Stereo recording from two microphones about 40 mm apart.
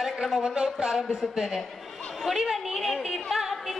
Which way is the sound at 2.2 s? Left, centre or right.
Centre.